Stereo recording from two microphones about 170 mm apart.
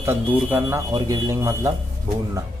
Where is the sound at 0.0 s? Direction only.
10° right (ahead or behind).